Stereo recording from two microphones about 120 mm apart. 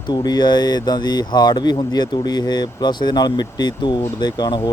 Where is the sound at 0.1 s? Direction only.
35° left (ahead or behind).